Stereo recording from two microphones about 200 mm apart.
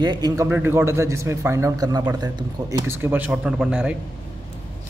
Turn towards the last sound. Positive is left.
turn(degrees=-5)  # may be behind; listen again after turning